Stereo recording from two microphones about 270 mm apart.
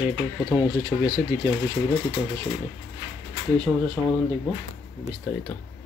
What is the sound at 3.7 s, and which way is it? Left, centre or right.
Speech, centre.